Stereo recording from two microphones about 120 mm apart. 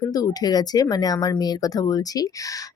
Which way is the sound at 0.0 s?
30° left (ahead or behind).